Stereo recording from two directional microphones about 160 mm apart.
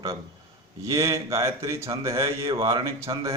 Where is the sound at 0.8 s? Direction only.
20° right (ahead or behind).